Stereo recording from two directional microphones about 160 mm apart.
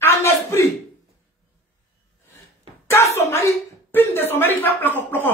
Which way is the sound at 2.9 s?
15° left (ahead or behind).